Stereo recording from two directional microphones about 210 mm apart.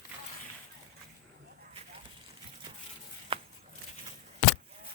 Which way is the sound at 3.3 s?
25° right (ahead or behind).